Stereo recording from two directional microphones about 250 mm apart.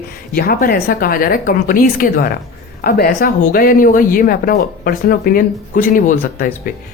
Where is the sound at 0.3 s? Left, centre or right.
Left.